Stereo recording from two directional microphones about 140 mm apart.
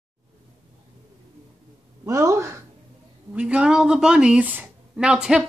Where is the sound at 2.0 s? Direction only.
20° right (ahead or behind).